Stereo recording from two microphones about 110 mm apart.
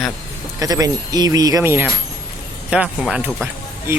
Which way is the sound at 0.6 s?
35° right (ahead or behind).